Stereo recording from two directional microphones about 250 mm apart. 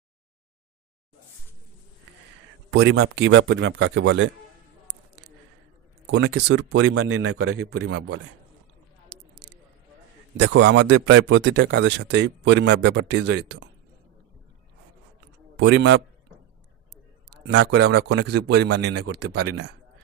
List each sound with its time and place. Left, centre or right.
2.9 s speech: right
6.1 s speech: right
9.1 s a sound: right
10.3 s speech: right
15.5 s a man's voice: right
17.3 s a man's voice: right
19.1 s speech: right